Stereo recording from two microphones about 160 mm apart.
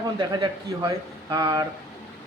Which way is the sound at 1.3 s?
25° right (ahead or behind).